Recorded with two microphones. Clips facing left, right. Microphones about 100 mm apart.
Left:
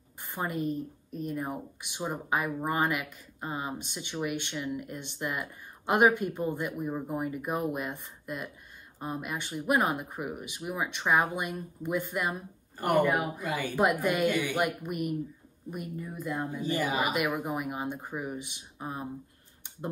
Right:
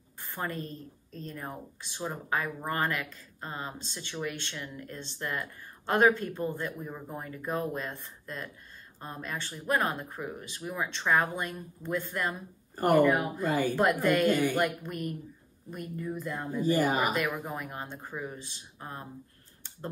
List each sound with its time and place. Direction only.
0.2 s speech: 15° left (ahead or behind)
13.0 s a woman's voice: 5° left (ahead or behind)
13.4 s speech: 45° right (ahead or behind)
14.5 s speech: 10° left (ahead or behind)
16.6 s speech: 45° right (ahead or behind)
17.1 s speech: 15° left (ahead or behind)